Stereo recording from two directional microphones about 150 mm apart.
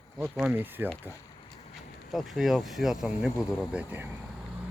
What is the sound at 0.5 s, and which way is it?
Speech, 15° right (ahead or behind).